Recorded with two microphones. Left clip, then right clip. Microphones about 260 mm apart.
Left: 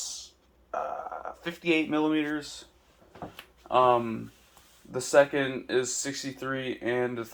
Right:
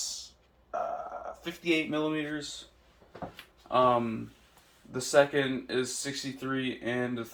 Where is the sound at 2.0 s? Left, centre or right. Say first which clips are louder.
Left 4 dB; left.